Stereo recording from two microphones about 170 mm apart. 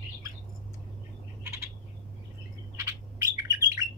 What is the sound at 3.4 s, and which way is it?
Bird, 20° right (ahead or behind).